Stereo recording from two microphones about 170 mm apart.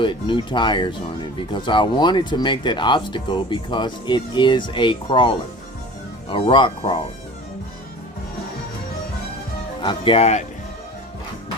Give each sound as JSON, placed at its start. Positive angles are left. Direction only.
{"t": 0.0, "sound": "speech", "side_deg": 30}
{"t": 9.8, "sound": "speech", "side_deg": 30}